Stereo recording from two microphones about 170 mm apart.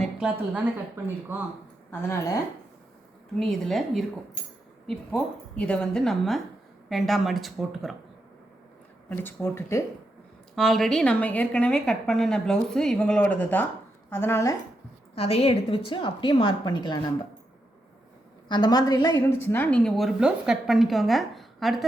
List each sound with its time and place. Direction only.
0.0 s speech: 5° right (ahead or behind)
1.9 s speech: 15° left (ahead or behind)
3.3 s a woman's voice: centre (ahead or behind)
9.0 s speech: 10° left (ahead or behind)
10.5 s a woman's voice: centre (ahead or behind)
15.1 s a woman's voice: 35° left (ahead or behind)
18.4 s a woman's voice: 25° left (ahead or behind); by 21.8 s centre (ahead or behind)